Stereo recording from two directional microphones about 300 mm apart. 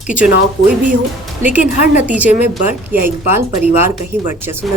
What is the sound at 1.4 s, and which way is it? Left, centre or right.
A woman's voice, centre.